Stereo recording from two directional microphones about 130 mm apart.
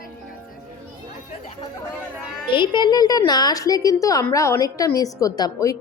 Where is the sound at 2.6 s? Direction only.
35° left (ahead or behind).